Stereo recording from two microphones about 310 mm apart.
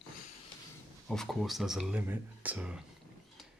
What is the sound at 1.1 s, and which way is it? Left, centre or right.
Speech, centre.